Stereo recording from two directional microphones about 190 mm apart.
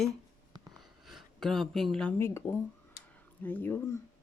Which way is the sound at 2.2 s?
15° left (ahead or behind).